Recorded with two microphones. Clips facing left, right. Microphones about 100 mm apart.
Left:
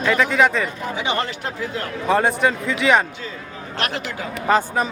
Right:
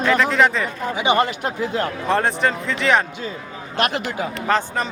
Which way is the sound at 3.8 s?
20° right (ahead or behind).